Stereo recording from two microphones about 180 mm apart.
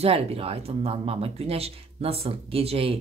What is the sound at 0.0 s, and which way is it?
Speech, 35° right (ahead or behind).